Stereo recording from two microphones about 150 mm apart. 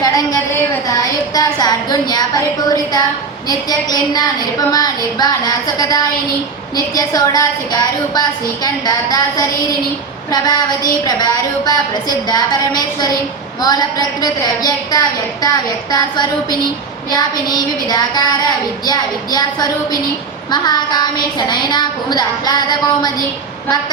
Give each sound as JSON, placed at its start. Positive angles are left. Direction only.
{"t": 0.0, "sound": "a sound", "side_deg": 25}
{"t": 0.9, "sound": "a woman's voice", "side_deg": 25}
{"t": 10.3, "sound": "a woman's voice", "side_deg": 25}